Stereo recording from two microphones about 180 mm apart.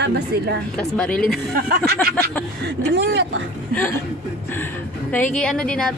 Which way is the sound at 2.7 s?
75° right (ahead or behind).